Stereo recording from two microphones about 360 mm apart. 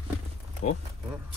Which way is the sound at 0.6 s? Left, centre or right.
Left.